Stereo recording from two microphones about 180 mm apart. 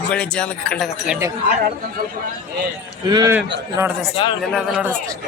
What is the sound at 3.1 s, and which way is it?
Speech, 20° right (ahead or behind).